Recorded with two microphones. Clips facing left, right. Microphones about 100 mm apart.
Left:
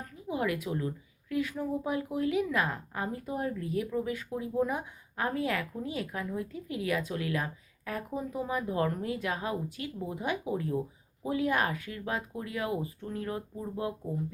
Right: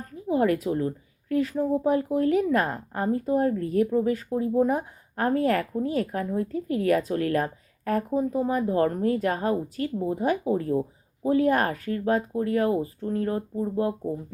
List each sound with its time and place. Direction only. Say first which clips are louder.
0.0 s speech: right 9 dB; 40° right (ahead or behind)